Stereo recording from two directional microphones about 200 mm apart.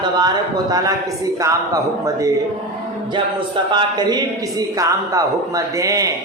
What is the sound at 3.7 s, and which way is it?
A man's voice, 20° right (ahead or behind).